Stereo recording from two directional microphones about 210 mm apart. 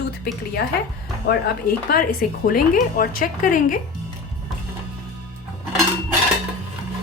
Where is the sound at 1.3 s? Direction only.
45° left (ahead or behind).